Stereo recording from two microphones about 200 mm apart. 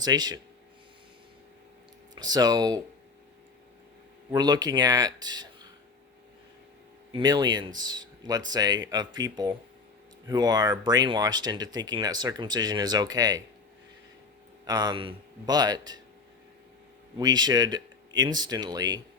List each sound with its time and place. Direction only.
0.0 s speech: 20° right (ahead or behind)
2.1 s speech: 20° right (ahead or behind)
4.3 s speech: 20° right (ahead or behind)
7.1 s speech: 20° right (ahead or behind)
14.7 s speech: 20° right (ahead or behind)
17.2 s speech: 20° right (ahead or behind)